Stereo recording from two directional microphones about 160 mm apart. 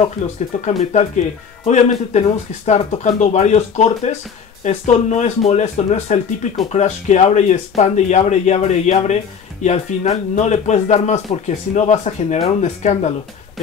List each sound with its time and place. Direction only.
0.2 s speech: 50° left (ahead or behind)